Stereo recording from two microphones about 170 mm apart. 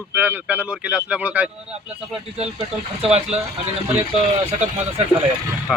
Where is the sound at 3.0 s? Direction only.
40° right (ahead or behind).